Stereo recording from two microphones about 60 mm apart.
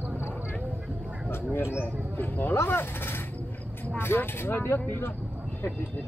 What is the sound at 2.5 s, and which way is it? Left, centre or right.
Speech, left.